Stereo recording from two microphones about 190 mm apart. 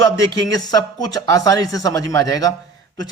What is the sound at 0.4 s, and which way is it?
Speech, 20° left (ahead or behind).